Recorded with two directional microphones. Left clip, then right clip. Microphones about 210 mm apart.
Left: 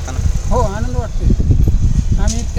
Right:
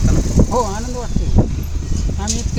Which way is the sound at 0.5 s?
5° left (ahead or behind).